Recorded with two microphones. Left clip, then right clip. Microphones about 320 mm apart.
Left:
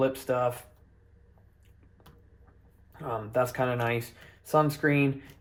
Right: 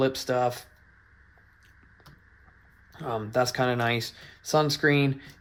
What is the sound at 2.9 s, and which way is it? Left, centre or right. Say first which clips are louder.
Speech: right 2 dB; right.